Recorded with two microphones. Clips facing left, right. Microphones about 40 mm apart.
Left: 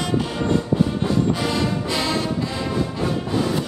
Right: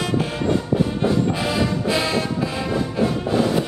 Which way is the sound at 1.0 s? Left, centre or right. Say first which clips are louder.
Right 1 dB; centre.